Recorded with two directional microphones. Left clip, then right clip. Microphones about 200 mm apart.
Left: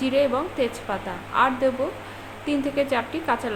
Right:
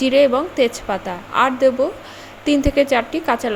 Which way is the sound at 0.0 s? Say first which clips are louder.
Right 7 dB; 35° right (ahead or behind).